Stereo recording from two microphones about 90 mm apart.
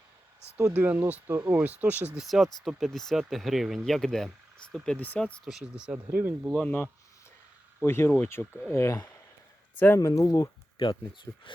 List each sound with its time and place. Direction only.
0.7 s speech: 20° right (ahead or behind)
2.1 s speech: centre (ahead or behind)
4.9 s speech: 15° left (ahead or behind)
5.5 s speech: 5° right (ahead or behind)
6.1 s speech: 20° right (ahead or behind)
6.7 s speech: 20° left (ahead or behind)
9.7 s speech: 20° left (ahead or behind)
10.0 s speech: 40° left (ahead or behind)
11.5 s speech: 65° left (ahead or behind)